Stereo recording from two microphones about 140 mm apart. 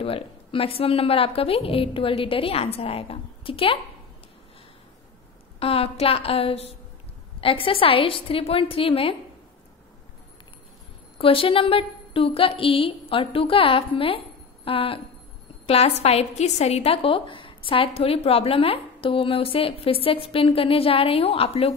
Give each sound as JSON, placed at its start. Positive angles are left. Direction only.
{"t": 0.0, "sound": "a woman's voice", "side_deg": 40}
{"t": 5.6, "sound": "a woman's voice", "side_deg": 45}
{"t": 11.1, "sound": "a woman's voice", "side_deg": 40}